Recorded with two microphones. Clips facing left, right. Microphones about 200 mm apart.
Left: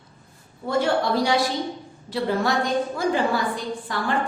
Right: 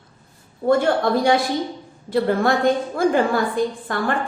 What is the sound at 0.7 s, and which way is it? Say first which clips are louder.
A woman's voice: right 4 dB; 55° right (ahead or behind).